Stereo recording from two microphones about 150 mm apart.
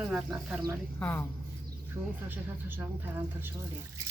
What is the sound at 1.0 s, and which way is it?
Speech, 15° left (ahead or behind).